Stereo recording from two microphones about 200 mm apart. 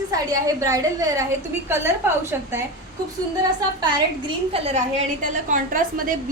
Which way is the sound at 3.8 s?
25° right (ahead or behind).